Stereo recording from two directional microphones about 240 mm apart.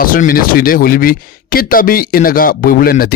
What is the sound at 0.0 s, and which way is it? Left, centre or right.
Speech, left.